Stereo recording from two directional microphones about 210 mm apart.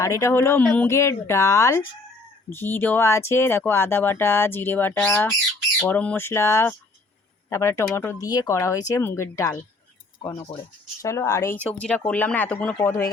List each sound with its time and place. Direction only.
0.0 s speech: 15° left (ahead or behind)